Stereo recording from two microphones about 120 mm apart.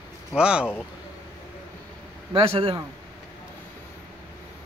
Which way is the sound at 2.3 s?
50° right (ahead or behind).